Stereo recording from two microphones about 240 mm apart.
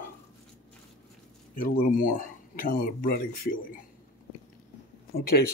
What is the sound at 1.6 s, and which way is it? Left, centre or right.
Speech, left.